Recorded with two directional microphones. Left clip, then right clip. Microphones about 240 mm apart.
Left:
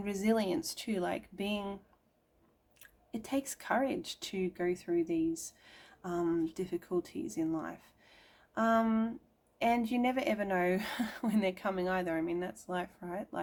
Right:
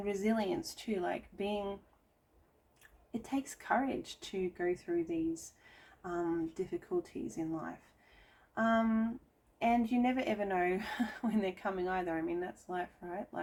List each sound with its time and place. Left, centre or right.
0.0 s a woman's voice: left
3.1 s a woman's voice: left
6.0 s a woman's voice: left